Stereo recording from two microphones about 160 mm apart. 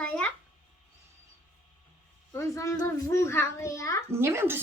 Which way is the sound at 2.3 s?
20° left (ahead or behind).